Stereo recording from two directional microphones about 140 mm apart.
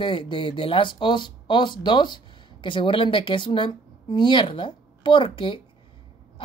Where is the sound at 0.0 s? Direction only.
35° left (ahead or behind).